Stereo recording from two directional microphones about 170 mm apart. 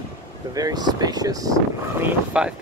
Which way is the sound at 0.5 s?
20° right (ahead or behind).